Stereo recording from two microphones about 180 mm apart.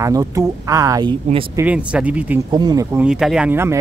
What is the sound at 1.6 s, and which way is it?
Speech, 5° right (ahead or behind).